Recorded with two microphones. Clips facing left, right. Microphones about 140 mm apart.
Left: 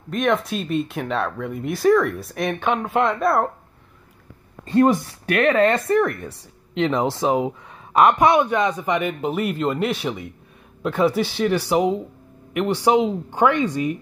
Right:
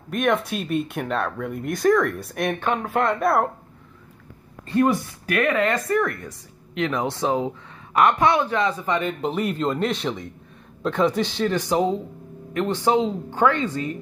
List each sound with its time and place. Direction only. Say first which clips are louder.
0.1 s speech: left 1 dB; centre (ahead or behind)
4.6 s speech: left 3 dB; 30° left (ahead or behind)